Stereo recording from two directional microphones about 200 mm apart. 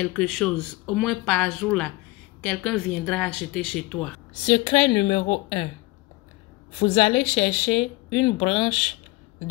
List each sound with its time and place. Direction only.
0.0 s speech: 5° left (ahead or behind)
4.3 s a woman's voice: 30° left (ahead or behind)
6.8 s a woman's voice: 30° left (ahead or behind)